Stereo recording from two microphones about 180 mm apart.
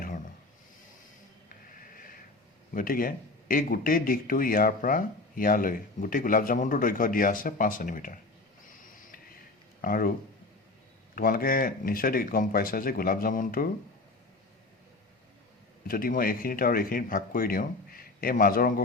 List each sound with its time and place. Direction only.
2.7 s speech: 50° left (ahead or behind)
9.8 s speech: 50° left (ahead or behind)
11.1 s speech: 55° left (ahead or behind)
15.9 s speech: 55° left (ahead or behind)